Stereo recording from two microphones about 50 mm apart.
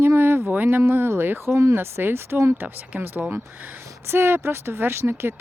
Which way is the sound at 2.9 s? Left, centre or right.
Right.